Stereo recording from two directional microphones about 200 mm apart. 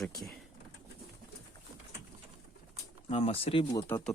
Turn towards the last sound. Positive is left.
turn(degrees=10)  # may be behind; listen again after turning